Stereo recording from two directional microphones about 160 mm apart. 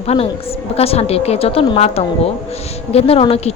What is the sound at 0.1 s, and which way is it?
Speech, 35° left (ahead or behind).